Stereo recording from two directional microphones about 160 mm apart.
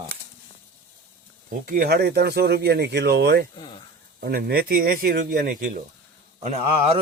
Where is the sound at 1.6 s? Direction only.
65° right (ahead or behind); by 3.4 s 90° right.